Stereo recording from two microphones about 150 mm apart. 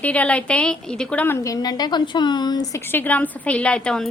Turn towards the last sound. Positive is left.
turn(degrees=5)  # may be behind; listen again after turning